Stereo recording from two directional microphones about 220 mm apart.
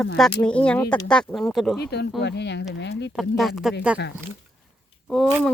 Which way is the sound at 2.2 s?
50° left (ahead or behind).